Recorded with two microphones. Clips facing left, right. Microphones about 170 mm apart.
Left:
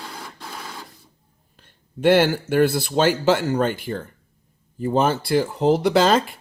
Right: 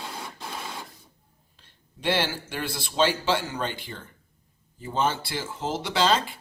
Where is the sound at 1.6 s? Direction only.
50° left (ahead or behind).